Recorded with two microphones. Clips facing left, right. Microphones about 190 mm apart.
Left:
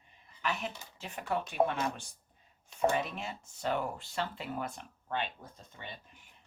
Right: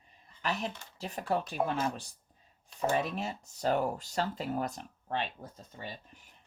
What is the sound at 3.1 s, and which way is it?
Speech, 40° right (ahead or behind).